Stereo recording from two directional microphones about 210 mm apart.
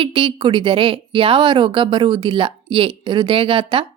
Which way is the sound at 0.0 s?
25° right (ahead or behind).